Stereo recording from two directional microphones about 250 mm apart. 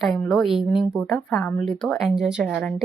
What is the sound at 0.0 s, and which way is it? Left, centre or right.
Speech, centre.